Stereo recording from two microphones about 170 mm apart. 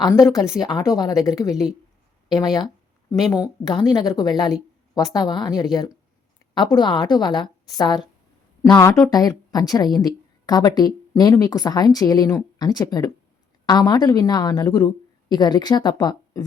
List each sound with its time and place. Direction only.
0.6 s speech: 20° left (ahead or behind)